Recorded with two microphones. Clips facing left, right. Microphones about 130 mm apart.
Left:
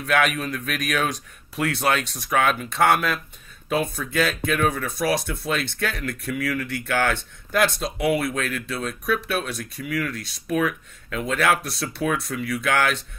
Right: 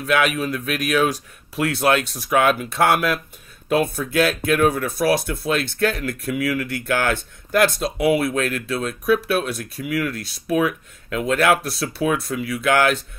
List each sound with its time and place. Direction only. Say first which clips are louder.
0.0 s speech: right 2 dB; 5° right (ahead or behind)
8.2 s speech: right 4 dB; 25° right (ahead or behind)
8.8 s speech: right 6 dB; 5° right (ahead or behind)